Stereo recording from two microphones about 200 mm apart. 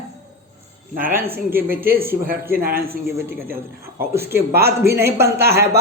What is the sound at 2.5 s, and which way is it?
Speech, 45° right (ahead or behind).